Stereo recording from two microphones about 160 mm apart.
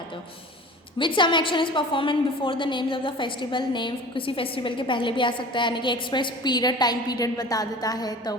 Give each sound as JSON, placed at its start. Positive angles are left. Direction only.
{"t": 0.9, "sound": "a woman's voice", "side_deg": 30}